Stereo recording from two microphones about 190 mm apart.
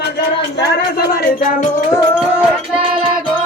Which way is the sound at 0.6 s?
55° left (ahead or behind).